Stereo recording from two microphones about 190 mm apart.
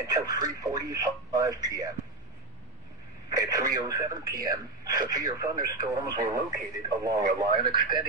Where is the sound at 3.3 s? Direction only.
20° right (ahead or behind).